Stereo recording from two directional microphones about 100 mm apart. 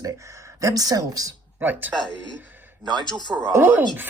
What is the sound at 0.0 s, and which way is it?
Speech, 35° right (ahead or behind).